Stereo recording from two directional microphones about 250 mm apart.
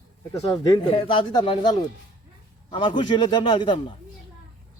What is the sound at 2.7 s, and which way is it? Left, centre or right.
A man's voice, centre.